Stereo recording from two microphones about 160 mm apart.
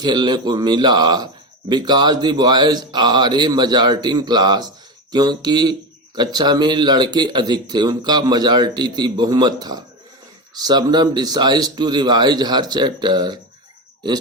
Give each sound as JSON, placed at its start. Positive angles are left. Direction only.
{"t": 0.0, "sound": "speech", "side_deg": -25}